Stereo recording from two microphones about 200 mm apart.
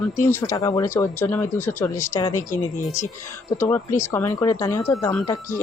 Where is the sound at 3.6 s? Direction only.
10° left (ahead or behind).